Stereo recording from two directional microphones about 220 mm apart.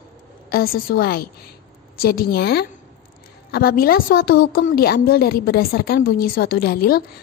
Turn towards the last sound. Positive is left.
turn(degrees=45)  # may be behind; listen again after turning